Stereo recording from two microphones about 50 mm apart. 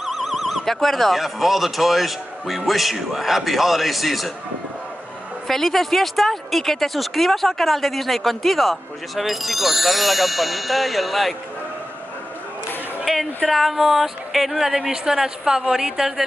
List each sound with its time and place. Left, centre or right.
0.0 s speech: centre
5.5 s speech: centre
13.0 s a sound: centre
13.5 s speech: centre